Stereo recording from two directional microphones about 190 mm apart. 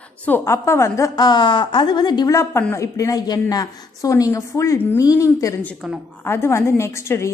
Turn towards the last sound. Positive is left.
turn(degrees=15)  # may be behind; listen again after turning